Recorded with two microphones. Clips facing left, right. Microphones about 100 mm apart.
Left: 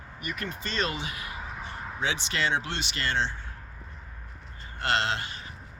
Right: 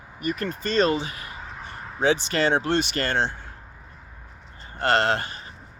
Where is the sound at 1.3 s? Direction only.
5° left (ahead or behind).